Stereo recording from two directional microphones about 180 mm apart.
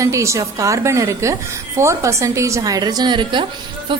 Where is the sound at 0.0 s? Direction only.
15° right (ahead or behind).